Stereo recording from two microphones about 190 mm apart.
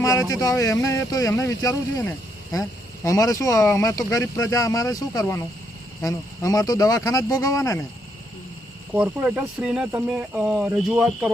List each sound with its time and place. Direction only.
0.0 s speech: 15° left (ahead or behind)
8.9 s speech: 10° right (ahead or behind)